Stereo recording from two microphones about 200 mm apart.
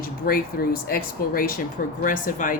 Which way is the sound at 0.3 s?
45° left (ahead or behind).